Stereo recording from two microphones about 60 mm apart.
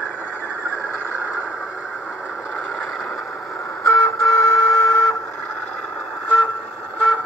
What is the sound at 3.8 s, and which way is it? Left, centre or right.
Vehicle, left.